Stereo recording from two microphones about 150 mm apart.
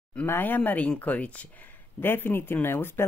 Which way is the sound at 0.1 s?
10° left (ahead or behind).